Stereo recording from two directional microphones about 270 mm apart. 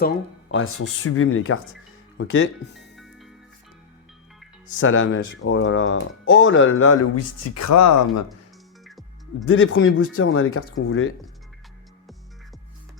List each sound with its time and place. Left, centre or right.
0.0 s speech: left
2.9 s music: centre
4.8 s speech: left
9.5 s speech: left